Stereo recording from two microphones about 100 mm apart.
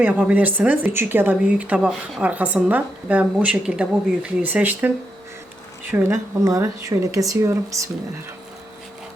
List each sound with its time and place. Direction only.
0.0 s speech: 15° right (ahead or behind)
6.0 s speech: 30° right (ahead or behind)